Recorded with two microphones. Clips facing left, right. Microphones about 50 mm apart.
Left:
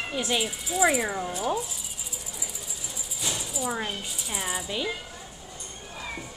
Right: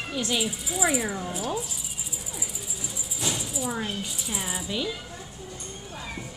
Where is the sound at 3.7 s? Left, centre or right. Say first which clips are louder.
Right 1 dB; centre.